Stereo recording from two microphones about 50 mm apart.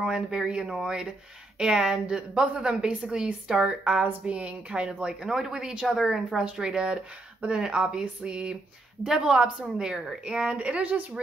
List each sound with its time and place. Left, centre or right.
0.0 s a woman's voice: centre
3.8 s a woman's voice: right